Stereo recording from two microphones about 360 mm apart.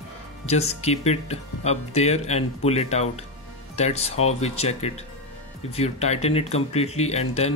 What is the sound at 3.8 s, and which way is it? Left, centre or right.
Speech, centre.